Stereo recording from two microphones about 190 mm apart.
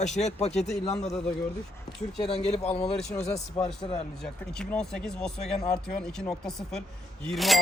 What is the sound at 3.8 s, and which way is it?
Speech, 30° left (ahead or behind).